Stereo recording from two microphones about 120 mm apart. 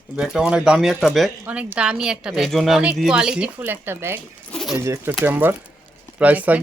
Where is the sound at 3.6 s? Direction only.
20° right (ahead or behind).